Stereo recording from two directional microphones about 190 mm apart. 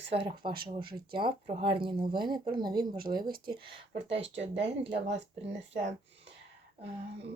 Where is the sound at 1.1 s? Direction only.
25° right (ahead or behind).